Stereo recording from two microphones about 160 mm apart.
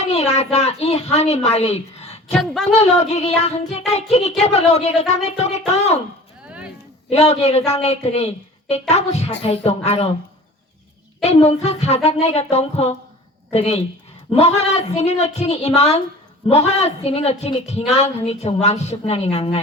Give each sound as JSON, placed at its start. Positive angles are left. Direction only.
{"t": 0.0, "sound": "a woman's voice", "side_deg": 40}
{"t": 2.4, "sound": "speech", "side_deg": 0}
{"t": 2.7, "sound": "child singing", "side_deg": 45}
{"t": 7.1, "sound": "a woman's voice", "side_deg": 40}
{"t": 8.9, "sound": "child singing", "side_deg": 40}
{"t": 9.6, "sound": "a woman's voice", "side_deg": 40}
{"t": 11.2, "sound": "a woman's voice", "side_deg": 40}